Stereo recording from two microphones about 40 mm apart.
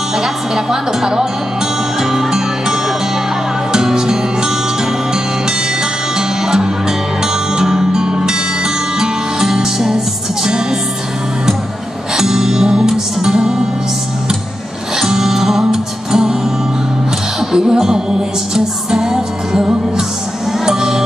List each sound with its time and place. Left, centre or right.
0.1 s speech: centre
2.0 s music: centre
6.1 s music: centre
12.2 s music: centre
15.0 s music: centre
17.4 s music: centre